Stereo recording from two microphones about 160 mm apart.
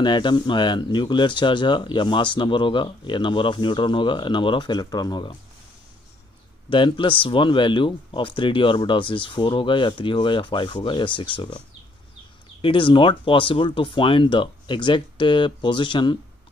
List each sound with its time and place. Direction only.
0.0 s speech: 30° left (ahead or behind)
6.7 s speech: 30° left (ahead or behind)
12.6 s speech: 35° left (ahead or behind)